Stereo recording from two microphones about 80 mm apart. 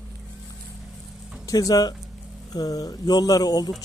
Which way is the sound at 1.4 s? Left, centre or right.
Left.